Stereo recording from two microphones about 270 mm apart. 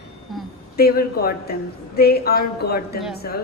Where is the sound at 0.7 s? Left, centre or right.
Left.